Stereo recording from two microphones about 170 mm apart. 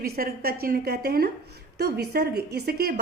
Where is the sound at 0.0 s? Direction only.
60° right (ahead or behind).